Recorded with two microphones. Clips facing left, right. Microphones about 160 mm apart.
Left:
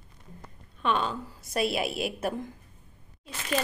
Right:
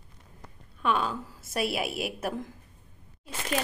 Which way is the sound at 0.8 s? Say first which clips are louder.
Even; 5° right (ahead or behind).